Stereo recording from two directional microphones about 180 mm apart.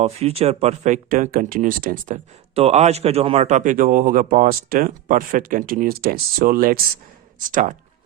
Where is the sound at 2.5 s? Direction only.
35° right (ahead or behind).